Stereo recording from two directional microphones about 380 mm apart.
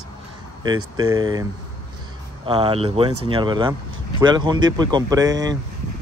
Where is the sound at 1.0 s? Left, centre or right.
Centre.